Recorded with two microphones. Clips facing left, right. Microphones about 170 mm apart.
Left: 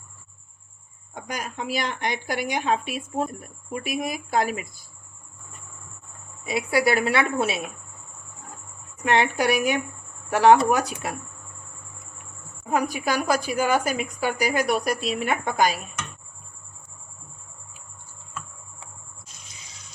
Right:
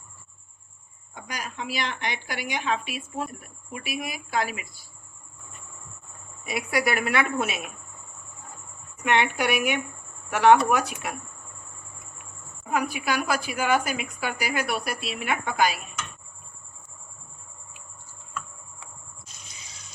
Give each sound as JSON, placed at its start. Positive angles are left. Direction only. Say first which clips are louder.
{"t": 1.1, "sound": "a woman's voice", "louder": "left 4 dB", "side_deg": 50}
{"t": 6.4, "sound": "a woman's voice", "louder": "left 4 dB", "side_deg": 25}
{"t": 9.0, "sound": "a woman's voice", "louder": "left 2 dB", "side_deg": 35}
{"t": 12.7, "sound": "a woman's voice", "louder": "left 2 dB", "side_deg": 40}